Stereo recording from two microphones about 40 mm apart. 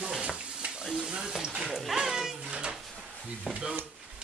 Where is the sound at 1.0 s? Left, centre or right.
Centre.